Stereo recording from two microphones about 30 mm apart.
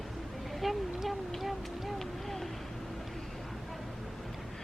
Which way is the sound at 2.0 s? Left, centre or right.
Centre.